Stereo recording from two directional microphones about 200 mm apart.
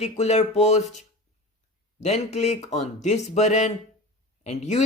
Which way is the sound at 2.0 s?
35° left (ahead or behind).